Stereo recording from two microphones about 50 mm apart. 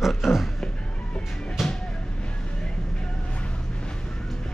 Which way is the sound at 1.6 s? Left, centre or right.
Centre.